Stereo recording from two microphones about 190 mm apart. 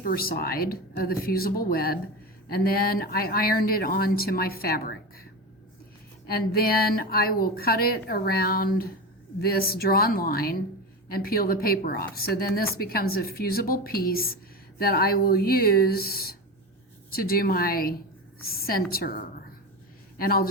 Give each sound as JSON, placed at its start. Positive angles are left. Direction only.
{"t": 0.0, "sound": "speech", "side_deg": 50}
{"t": 6.2, "sound": "speech", "side_deg": 55}